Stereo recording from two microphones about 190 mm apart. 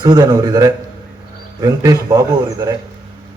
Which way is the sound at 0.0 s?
20° right (ahead or behind).